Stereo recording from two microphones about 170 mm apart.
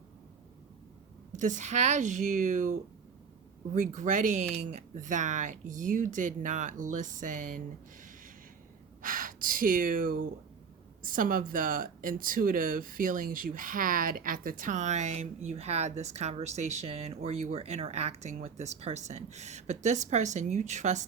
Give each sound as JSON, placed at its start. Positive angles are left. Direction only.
{"t": 1.4, "sound": "speech", "side_deg": -45}
{"t": 3.8, "sound": "speech", "side_deg": -45}
{"t": 9.0, "sound": "gasp", "side_deg": -55}
{"t": 11.0, "sound": "speech", "side_deg": -55}